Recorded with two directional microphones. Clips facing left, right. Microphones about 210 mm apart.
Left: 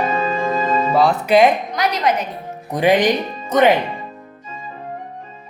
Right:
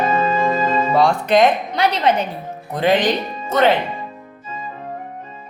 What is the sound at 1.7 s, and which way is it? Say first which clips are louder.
Speech: right 2 dB; 30° right (ahead or behind).